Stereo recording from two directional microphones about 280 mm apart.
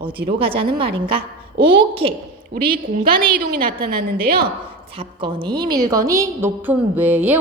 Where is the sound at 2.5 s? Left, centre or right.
Right.